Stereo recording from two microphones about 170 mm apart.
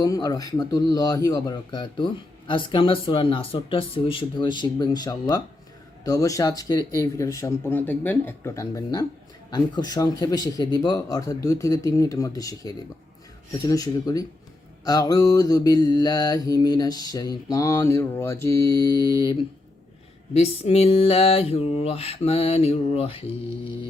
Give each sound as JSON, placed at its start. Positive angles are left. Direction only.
{"t": 0.0, "sound": "mantra", "side_deg": 20}
{"t": 20.3, "sound": "mantra", "side_deg": 35}